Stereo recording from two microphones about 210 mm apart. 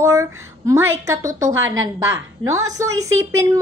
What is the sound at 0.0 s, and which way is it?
A woman's voice, 15° right (ahead or behind).